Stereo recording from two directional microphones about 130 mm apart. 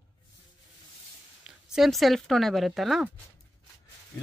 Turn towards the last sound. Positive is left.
turn(degrees=0)  # may be behind; listen again after turning